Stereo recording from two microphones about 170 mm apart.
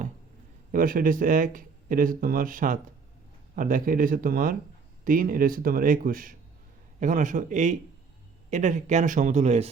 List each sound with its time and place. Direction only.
0.7 s speech: 55° right (ahead or behind)